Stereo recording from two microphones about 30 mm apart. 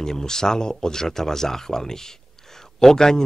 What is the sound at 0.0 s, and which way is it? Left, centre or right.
Speech, centre.